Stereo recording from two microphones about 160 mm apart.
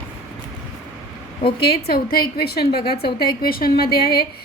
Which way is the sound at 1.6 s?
80° left.